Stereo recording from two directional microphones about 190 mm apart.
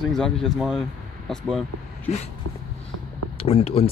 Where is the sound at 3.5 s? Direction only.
30° left (ahead or behind).